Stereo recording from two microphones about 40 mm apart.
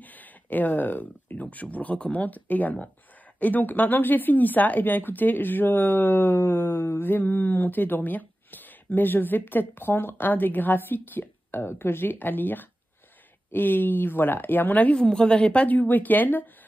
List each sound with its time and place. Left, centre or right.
0.0 s speech: left
2.2 s speech: left
12.1 s speech: left
14.9 s a woman's voice: left
15.6 s speech: left